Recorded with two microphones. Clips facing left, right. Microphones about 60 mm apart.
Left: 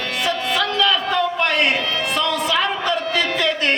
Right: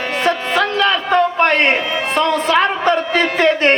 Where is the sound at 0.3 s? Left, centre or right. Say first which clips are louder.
Right 5 dB; right.